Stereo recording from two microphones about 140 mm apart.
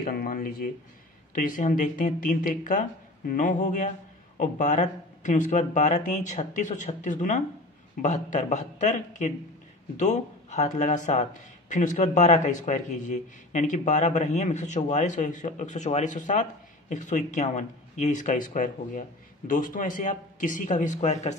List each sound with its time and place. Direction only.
0.0 s speech: 90° left
1.3 s a man's voice: 75° left (ahead or behind); by 21.4 s 55° left (ahead or behind)